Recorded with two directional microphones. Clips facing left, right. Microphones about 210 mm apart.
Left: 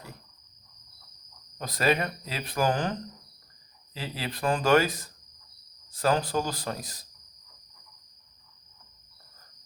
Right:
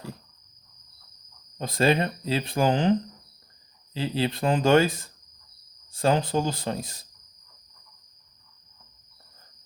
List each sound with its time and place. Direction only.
1.5 s speech: 25° right (ahead or behind)
3.9 s speech: 25° right (ahead or behind)